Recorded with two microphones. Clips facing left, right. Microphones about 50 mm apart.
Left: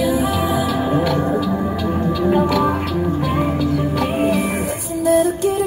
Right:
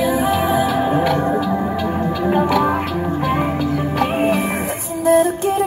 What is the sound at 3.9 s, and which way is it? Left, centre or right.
Music, right.